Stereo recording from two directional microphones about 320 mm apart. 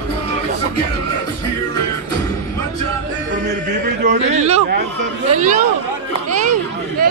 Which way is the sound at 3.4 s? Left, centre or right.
Right.